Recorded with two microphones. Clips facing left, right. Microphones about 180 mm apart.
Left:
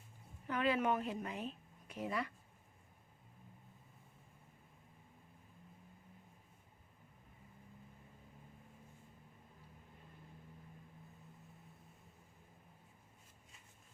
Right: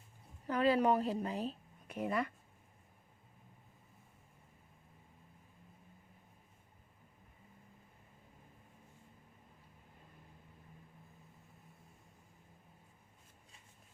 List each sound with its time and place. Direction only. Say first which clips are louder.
0.4 s a woman's voice: right 5 dB; 35° right (ahead or behind)
1.9 s speech: right 4 dB; 55° right (ahead or behind)